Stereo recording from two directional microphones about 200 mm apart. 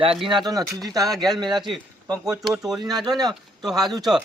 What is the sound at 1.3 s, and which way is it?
Speech, 20° right (ahead or behind).